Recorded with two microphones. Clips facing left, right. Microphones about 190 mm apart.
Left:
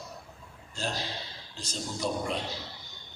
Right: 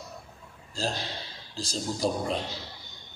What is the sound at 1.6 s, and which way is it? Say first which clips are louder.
Speech: right 5 dB; 35° right (ahead or behind).